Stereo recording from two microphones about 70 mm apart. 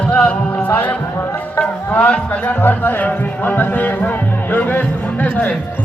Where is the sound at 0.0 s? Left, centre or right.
Centre.